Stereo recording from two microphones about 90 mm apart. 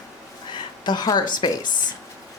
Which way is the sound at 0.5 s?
55° left (ahead or behind).